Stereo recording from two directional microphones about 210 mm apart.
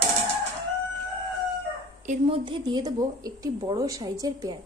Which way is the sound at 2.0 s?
30° right (ahead or behind).